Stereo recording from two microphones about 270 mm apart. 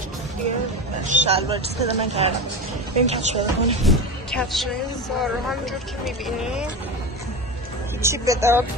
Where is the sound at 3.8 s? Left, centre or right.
Centre.